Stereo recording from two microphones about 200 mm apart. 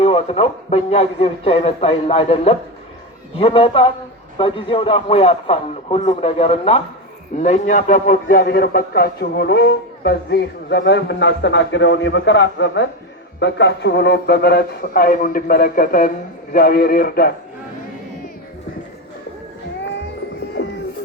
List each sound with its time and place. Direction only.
0.0 s a man's voice: 30° left (ahead or behind); by 17.3 s 50° left (ahead or behind)
20.6 s music: 65° left (ahead or behind)